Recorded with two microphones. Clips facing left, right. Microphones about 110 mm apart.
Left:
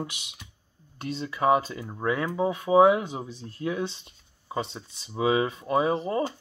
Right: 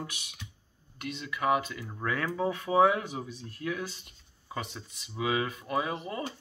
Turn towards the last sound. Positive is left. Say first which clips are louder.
# left 9 dB
turn(degrees=30)  # may be behind; listen again after turning